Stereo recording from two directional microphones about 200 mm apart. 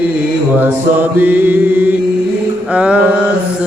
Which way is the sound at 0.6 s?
10° right (ahead or behind).